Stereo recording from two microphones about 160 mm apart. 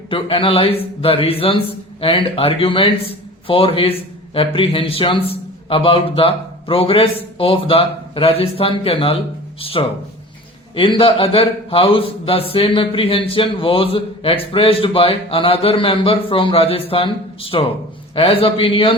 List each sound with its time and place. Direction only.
0.1 s a man's voice: 35° left (ahead or behind)